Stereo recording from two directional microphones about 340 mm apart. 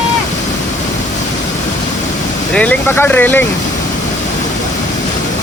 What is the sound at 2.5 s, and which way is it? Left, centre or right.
Speech, centre.